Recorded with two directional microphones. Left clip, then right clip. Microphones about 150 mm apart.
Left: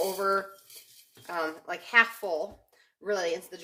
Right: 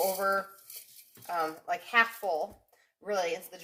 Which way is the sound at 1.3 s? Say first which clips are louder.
Right 1 dB; 20° left (ahead or behind).